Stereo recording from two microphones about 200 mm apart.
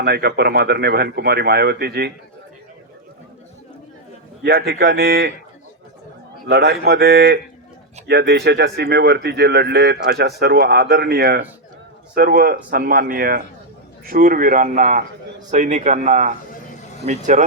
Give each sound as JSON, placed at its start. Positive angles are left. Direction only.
{"t": 0.0, "sound": "speech", "side_deg": -55}
{"t": 4.4, "sound": "speech", "side_deg": -55}
{"t": 6.5, "sound": "a man's voice", "side_deg": -55}